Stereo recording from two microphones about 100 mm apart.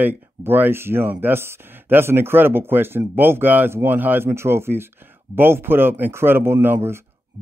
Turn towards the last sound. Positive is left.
turn(degrees=-25)  # may be behind; listen again after turning